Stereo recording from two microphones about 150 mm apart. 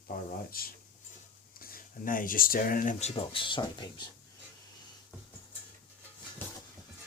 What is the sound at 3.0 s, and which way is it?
Speech, 40° left (ahead or behind).